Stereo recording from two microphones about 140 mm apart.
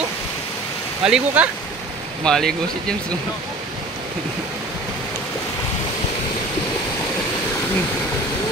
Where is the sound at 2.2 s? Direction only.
5° left (ahead or behind).